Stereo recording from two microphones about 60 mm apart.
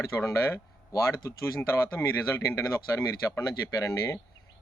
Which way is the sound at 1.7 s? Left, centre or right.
Left.